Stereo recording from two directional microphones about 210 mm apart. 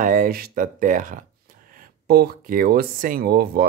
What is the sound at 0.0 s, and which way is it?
Speech, 40° right (ahead or behind).